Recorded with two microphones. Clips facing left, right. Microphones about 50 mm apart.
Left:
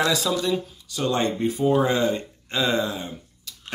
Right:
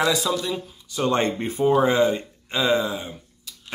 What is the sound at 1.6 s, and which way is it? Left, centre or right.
Speech, centre.